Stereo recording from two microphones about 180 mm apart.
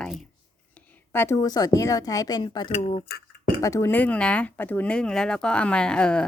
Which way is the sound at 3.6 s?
15° left (ahead or behind).